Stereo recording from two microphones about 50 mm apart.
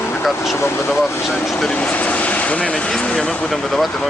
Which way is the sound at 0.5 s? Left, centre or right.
Left.